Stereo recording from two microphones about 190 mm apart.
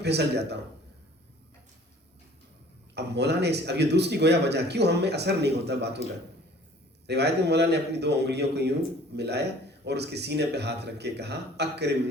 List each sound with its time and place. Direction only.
0.0 s speech: 60° right (ahead or behind)
2.9 s speech: 60° right (ahead or behind)
7.1 s speech: 60° right (ahead or behind)